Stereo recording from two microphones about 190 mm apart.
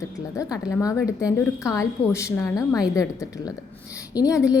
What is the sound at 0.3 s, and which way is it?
A woman's voice, 20° left (ahead or behind).